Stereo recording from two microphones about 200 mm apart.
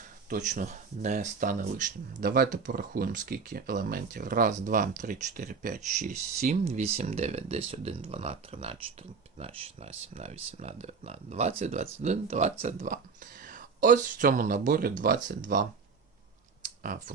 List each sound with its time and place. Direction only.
0.3 s speech: 40° right (ahead or behind)
16.6 s clicking: 40° right (ahead or behind)